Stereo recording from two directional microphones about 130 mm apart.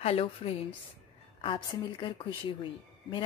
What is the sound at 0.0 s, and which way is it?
Speech, 50° left (ahead or behind).